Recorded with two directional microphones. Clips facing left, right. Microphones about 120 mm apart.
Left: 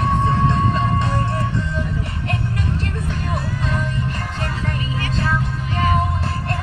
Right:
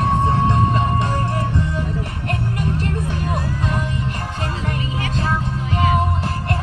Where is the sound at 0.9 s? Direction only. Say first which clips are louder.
Even; 45° right (ahead or behind).